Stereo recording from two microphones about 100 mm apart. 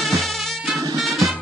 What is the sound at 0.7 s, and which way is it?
Music, 35° right (ahead or behind).